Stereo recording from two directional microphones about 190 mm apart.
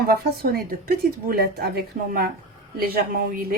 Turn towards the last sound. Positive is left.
turn(degrees=-50)  # may be behind; listen again after turning